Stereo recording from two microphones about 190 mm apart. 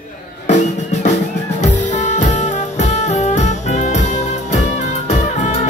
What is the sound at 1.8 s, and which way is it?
Music, 40° left (ahead or behind).